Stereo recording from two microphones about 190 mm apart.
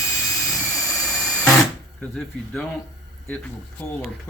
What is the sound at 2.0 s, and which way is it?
Speech, 5° left (ahead or behind).